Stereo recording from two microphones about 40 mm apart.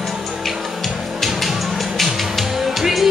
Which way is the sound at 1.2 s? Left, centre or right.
Centre.